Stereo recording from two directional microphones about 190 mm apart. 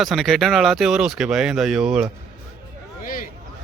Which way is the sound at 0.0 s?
Centre (ahead or behind).